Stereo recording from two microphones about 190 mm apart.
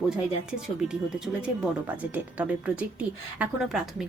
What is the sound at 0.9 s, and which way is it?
Speech, 5° right (ahead or behind).